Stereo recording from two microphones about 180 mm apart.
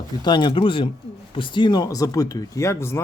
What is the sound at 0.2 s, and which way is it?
Speech, 25° left (ahead or behind).